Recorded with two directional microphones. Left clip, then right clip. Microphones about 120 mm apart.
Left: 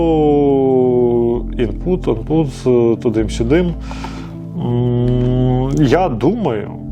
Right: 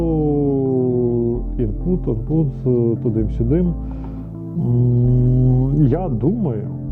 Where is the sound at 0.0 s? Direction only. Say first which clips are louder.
Left 7 dB; 20° left (ahead or behind).